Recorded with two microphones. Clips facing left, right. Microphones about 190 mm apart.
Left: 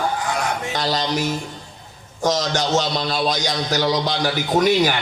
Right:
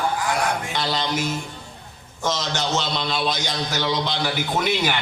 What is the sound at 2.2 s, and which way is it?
A man's voice, 45° left (ahead or behind).